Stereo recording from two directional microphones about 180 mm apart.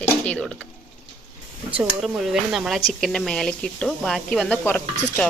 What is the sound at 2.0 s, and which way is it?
A woman's voice, centre (ahead or behind).